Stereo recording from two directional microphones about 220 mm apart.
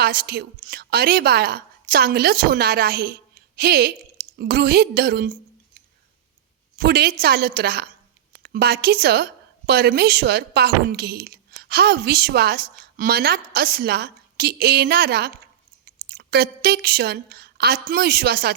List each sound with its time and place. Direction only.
0.0 s a woman's voice: 45° right (ahead or behind)
6.7 s a woman's voice: 45° right (ahead or behind)